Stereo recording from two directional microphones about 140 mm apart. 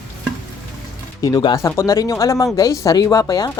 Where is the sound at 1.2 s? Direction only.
25° left (ahead or behind).